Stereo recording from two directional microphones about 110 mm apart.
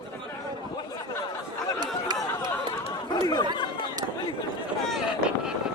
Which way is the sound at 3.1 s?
40° left (ahead or behind).